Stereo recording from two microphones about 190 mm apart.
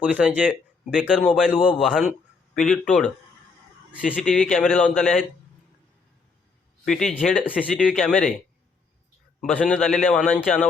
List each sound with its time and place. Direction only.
0.0 s speech: 5° right (ahead or behind)
6.8 s speech: centre (ahead or behind)
9.4 s speech: 5° left (ahead or behind)